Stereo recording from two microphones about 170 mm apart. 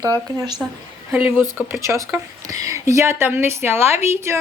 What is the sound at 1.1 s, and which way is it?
Speech, 10° right (ahead or behind).